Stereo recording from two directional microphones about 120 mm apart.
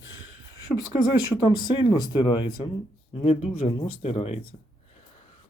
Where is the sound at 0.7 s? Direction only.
10° left (ahead or behind).